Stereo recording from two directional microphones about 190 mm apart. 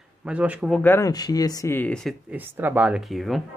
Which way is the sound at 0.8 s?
15° left (ahead or behind).